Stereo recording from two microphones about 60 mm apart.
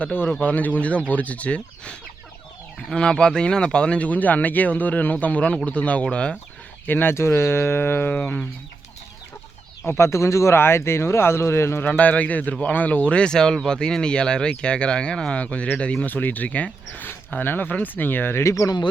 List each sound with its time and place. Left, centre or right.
0.0 s speech: left
6.8 s speech: left
8.1 s speech: left
9.8 s speech: left
11.8 s speech: left
17.1 s speech: left
18.4 s speech: left